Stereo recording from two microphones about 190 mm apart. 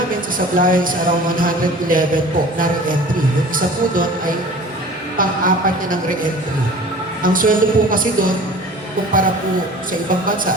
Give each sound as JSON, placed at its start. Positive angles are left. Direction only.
{"t": 0.3, "sound": "music", "side_deg": -45}
{"t": 5.1, "sound": "music", "side_deg": -45}